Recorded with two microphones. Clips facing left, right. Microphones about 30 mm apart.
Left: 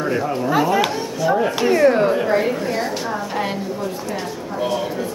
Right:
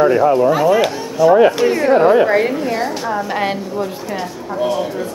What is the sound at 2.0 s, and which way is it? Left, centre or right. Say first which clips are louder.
Speech: right 6 dB; right.